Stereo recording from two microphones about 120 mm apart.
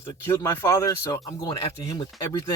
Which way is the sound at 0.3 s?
20° left (ahead or behind).